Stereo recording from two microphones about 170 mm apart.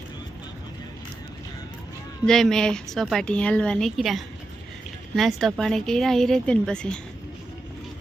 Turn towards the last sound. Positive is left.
turn(degrees=5)  # may be behind; listen again after turning